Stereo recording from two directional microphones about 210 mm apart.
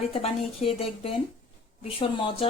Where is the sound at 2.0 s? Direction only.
25° left (ahead or behind).